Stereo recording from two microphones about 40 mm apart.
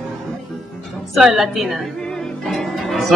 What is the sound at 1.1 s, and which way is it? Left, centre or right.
Speech, centre.